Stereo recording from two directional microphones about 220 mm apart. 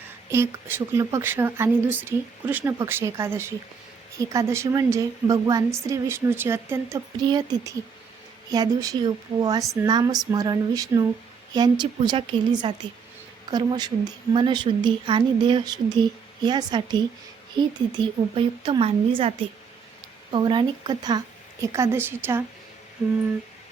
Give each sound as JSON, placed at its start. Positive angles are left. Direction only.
{"t": 0.3, "sound": "a woman's voice", "side_deg": -10}
{"t": 20.3, "sound": "a woman's voice", "side_deg": -20}